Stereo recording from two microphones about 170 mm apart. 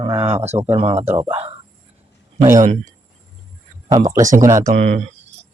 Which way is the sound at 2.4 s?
20° right (ahead or behind).